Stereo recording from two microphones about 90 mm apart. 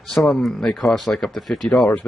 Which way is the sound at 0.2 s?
5° left (ahead or behind).